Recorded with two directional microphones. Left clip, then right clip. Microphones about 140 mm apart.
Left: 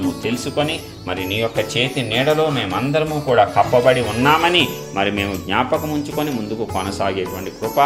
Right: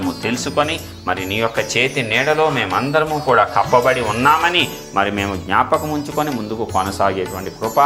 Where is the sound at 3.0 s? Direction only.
20° left (ahead or behind).